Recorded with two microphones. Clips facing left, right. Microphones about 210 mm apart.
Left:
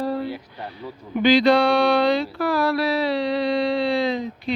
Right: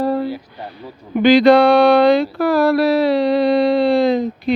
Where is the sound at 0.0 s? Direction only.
45° right (ahead or behind).